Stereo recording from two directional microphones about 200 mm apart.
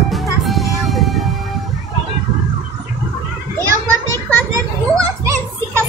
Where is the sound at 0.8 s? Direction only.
Centre (ahead or behind).